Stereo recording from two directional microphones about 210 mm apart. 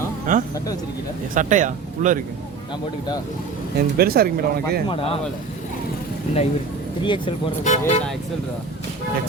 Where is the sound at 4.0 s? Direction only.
45° right (ahead or behind).